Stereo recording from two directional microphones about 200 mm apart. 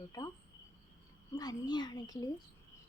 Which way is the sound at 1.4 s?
20° left (ahead or behind).